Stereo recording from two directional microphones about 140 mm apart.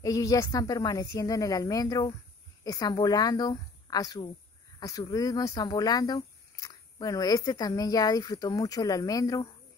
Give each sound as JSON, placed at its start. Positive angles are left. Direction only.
{"t": 0.0, "sound": "speech", "side_deg": 25}